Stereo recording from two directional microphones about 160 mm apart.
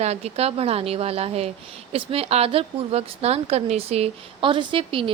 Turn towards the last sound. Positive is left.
turn(degrees=-35)  # may be behind; listen again after turning